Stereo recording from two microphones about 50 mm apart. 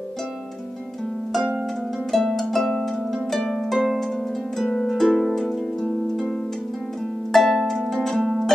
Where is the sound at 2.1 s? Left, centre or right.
Centre.